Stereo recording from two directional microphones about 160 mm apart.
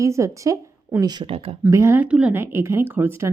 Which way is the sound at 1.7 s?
15° right (ahead or behind).